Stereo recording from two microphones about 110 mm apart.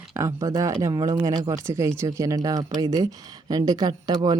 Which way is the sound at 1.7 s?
25° right (ahead or behind).